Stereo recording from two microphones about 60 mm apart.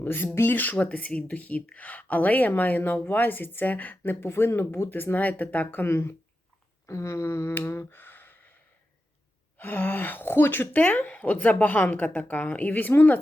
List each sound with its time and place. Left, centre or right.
0.0 s a woman's voice: left
5.8 s speech: left
6.8 s speech: left
7.7 s a sound: left
9.6 s a woman's voice: left